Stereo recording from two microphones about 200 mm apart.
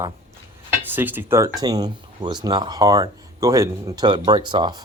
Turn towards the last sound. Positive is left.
turn(degrees=-25)  # may be behind; listen again after turning